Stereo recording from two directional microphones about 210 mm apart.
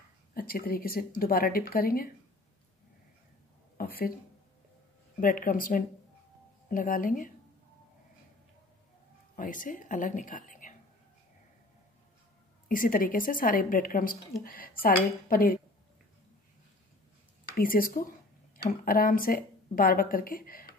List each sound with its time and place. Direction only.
0.3 s a woman's voice: 45° left (ahead or behind)
3.7 s a sound: 45° left (ahead or behind)
5.2 s a woman's voice: 40° left (ahead or behind)
9.3 s speech: 40° left (ahead or behind)
12.6 s a woman's voice: 40° left (ahead or behind)
17.6 s a woman's voice: 40° left (ahead or behind)